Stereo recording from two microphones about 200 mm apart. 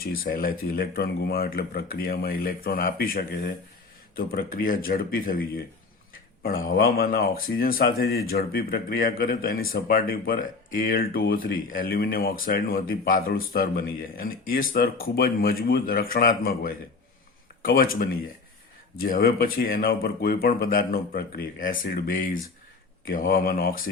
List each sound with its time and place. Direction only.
0.0 s speech: 45° left (ahead or behind)